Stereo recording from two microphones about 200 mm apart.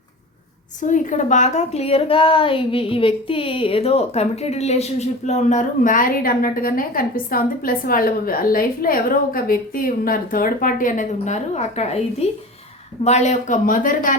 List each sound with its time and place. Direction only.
0.8 s a woman's voice: 40° left (ahead or behind)